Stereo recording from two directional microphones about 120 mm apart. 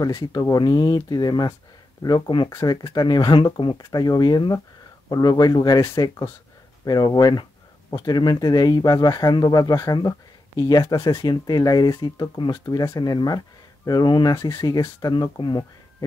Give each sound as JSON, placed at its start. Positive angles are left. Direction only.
{"t": 0.0, "sound": "speech", "side_deg": 30}